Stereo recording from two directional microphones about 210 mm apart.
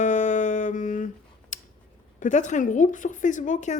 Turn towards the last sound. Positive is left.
turn(degrees=35)  # may be behind; listen again after turning